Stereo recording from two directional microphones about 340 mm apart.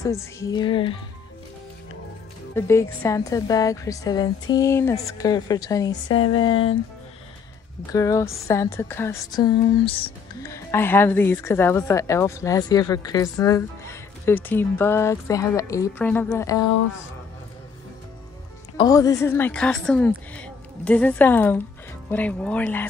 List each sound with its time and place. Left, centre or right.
0.0 s speech: centre
2.5 s speech: centre
6.5 s speech: left
7.9 s speech: centre
18.8 s a woman's voice: centre